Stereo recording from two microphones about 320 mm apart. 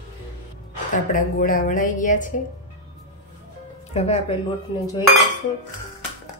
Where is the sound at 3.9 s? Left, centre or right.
Centre.